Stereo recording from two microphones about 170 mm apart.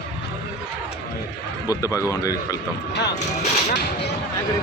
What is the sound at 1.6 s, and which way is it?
Speech, 20° left (ahead or behind).